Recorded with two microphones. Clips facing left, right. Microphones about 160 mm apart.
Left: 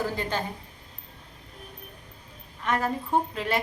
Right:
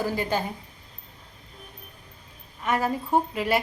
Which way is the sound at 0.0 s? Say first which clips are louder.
Right 3 dB; 10° right (ahead or behind).